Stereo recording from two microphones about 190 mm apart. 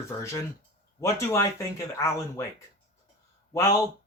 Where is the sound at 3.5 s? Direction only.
15° left (ahead or behind).